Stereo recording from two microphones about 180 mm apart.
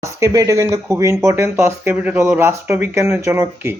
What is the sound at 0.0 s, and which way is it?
Speech, 15° right (ahead or behind).